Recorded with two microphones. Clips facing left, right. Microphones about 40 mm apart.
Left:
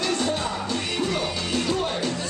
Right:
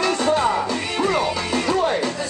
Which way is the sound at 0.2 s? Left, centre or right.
Right.